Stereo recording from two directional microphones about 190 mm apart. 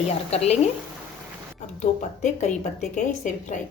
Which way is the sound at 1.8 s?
40° left (ahead or behind).